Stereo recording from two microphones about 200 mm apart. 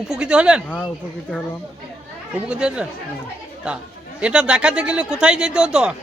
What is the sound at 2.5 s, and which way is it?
Speech, 5° right (ahead or behind).